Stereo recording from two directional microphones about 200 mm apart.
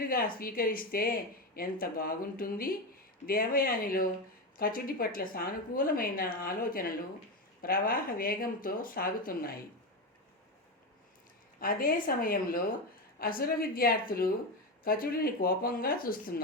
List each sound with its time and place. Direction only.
0.0 s speech: 45° left (ahead or behind)
11.6 s speech: 45° left (ahead or behind)